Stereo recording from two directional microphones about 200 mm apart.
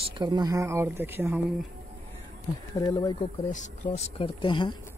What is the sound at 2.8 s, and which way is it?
Speech, 20° left (ahead or behind).